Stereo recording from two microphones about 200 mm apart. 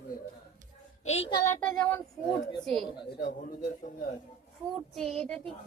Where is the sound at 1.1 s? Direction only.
30° left (ahead or behind).